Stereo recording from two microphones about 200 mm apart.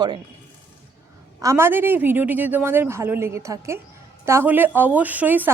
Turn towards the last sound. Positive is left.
turn(degrees=-10)  # may be behind; listen again after turning